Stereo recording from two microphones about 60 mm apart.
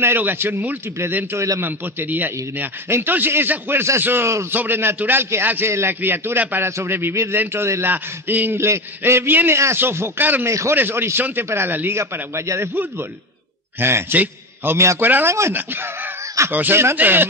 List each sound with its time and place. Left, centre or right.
0.0 s a man's voice: right
5.7 s a man's voice: right
6.0 s a man's voice: right
7.9 s a man's voice: right
8.5 s a man's voice: right
10.4 s speech: right
10.7 s a man's voice: right
12.0 s a man's voice: right
13.7 s a man's voice: right
14.1 s a man's voice: right
16.4 s a man's voice: right